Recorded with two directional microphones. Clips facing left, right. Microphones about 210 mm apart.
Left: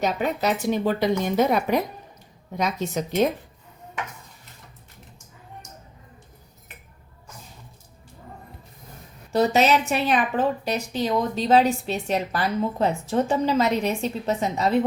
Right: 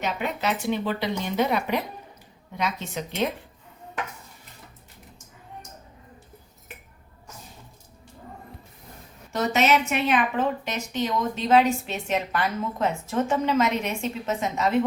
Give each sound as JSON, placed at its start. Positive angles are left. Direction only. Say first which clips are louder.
{"t": 0.0, "sound": "a woman's voice", "louder": "left 4 dB", "side_deg": 40}
{"t": 9.3, "sound": "a woman's voice", "louder": "left 3 dB", "side_deg": 35}